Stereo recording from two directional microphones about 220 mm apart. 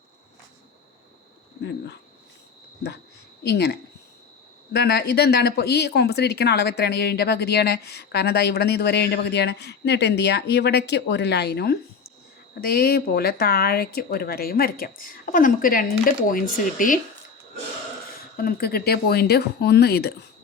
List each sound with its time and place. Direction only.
3.4 s speech: 50° left (ahead or behind)
18.3 s speech: 45° left (ahead or behind)